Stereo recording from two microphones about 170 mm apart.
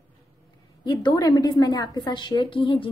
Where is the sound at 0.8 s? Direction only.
25° left (ahead or behind).